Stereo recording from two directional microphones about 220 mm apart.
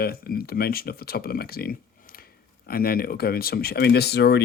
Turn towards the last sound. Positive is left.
turn(degrees=50)  # may be behind; listen again after turning